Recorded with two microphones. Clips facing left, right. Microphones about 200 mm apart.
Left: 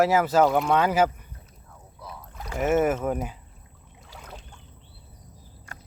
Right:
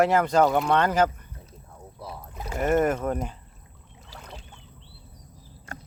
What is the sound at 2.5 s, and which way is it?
Speech, 5° left (ahead or behind).